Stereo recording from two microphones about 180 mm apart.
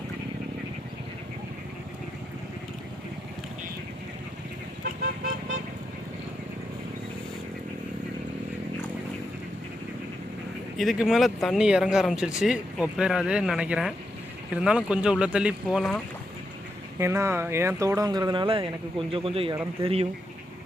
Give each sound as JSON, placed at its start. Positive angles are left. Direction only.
{"t": 4.8, "sound": "vehicle", "side_deg": -55}
{"t": 10.8, "sound": "speech", "side_deg": 0}
{"t": 17.0, "sound": "speech", "side_deg": -15}